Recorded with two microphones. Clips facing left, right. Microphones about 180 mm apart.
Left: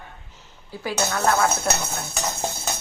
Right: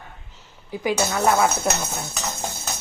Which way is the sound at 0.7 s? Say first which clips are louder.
Right 3 dB; 15° right (ahead or behind).